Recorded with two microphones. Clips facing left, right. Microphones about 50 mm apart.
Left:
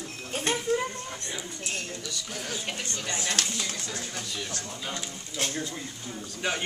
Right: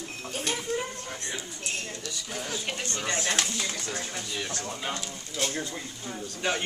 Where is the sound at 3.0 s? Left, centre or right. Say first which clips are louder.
Right 4 dB; right.